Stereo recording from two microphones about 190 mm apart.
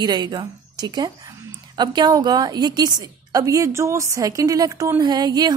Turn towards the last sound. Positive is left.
turn(degrees=-20)  # may be behind; listen again after turning